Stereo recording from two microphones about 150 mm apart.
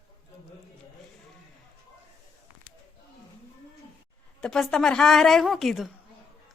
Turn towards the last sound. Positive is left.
turn(degrees=0)  # may be behind; listen again after turning